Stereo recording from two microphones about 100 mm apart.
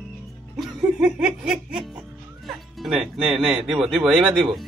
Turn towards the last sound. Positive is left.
turn(degrees=-5)  # may be behind; listen again after turning